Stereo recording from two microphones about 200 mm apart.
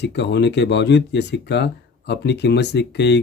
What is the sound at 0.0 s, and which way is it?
Speech, 60° left (ahead or behind).